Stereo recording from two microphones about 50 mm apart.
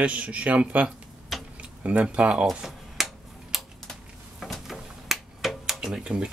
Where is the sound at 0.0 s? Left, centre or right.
Right.